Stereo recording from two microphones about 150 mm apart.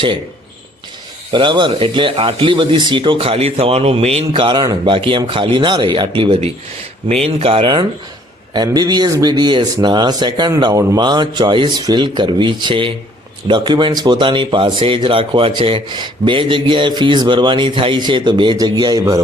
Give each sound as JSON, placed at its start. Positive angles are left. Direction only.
{"t": 1.3, "sound": "speech", "side_deg": -30}